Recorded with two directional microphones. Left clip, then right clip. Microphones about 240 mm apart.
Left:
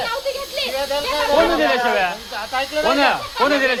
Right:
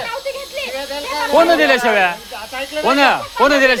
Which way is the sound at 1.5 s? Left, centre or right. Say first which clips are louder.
Right 4 dB; right.